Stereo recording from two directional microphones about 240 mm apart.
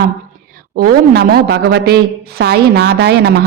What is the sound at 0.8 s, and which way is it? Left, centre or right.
A man's voice, right.